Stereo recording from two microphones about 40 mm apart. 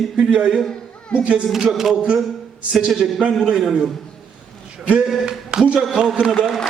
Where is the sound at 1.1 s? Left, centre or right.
Left.